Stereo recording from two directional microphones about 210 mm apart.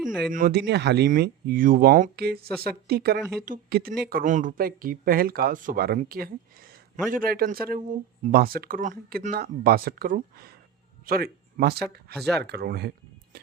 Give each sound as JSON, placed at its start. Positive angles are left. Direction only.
{"t": 0.0, "sound": "speech", "side_deg": 0}
{"t": 0.3, "sound": "speech", "side_deg": -45}